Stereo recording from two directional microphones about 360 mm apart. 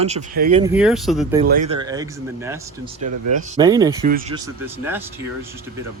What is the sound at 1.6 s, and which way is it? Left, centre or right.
Speech, centre.